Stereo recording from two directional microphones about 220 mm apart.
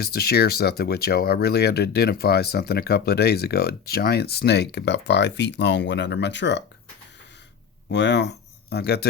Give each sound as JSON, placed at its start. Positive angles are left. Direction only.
{"t": 0.0, "sound": "speech", "side_deg": 45}
{"t": 7.9, "sound": "speech", "side_deg": 55}